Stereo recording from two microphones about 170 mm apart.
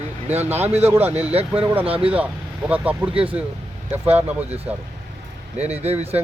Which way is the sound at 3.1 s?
30° right (ahead or behind).